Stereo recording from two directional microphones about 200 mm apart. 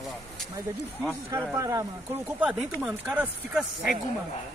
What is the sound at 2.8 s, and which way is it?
Speech, 5° right (ahead or behind).